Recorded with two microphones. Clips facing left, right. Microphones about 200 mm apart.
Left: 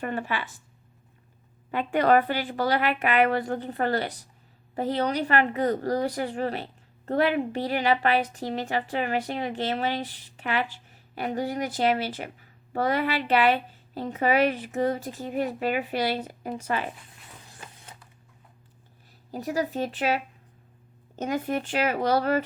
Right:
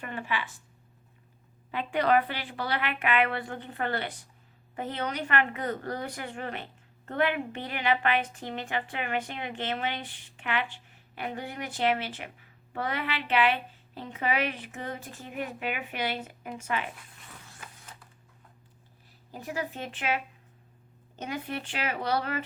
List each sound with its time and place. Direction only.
0.0 s speech: 40° left (ahead or behind)
1.7 s speech: 45° left (ahead or behind)
19.3 s speech: 40° left (ahead or behind)